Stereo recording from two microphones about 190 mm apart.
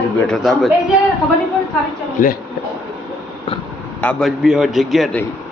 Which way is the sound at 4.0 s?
5° left (ahead or behind).